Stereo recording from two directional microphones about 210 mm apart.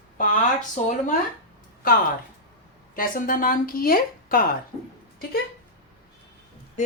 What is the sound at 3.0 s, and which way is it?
A woman's voice, 40° left (ahead or behind).